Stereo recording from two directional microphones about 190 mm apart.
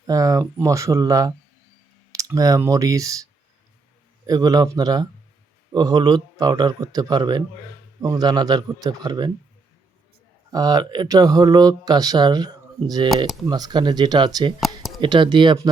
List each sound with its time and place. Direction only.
0.1 s speech: 20° right (ahead or behind)
4.3 s speech: 20° right (ahead or behind)
10.5 s speech: 20° right (ahead or behind)